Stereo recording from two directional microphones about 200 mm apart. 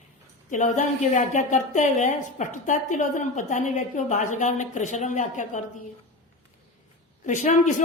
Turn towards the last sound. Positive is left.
turn(degrees=35)  # may be behind; listen again after turning